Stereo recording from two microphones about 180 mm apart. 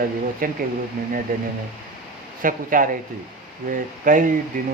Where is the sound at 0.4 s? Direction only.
50° right (ahead or behind).